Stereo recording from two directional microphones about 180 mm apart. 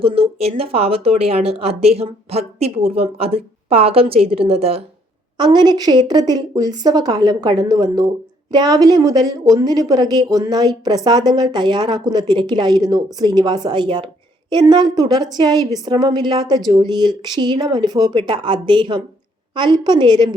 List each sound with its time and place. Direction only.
0.0 s a woman's voice: 30° right (ahead or behind)
5.4 s a woman's voice: 25° right (ahead or behind)